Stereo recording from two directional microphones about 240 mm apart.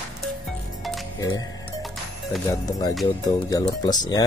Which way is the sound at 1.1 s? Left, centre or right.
Centre.